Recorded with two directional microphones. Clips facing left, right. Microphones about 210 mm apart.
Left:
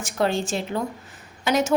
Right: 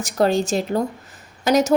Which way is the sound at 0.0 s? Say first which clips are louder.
Right 5 dB; 40° right (ahead or behind).